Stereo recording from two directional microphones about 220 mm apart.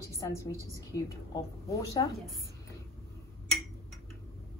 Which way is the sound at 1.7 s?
15° left (ahead or behind).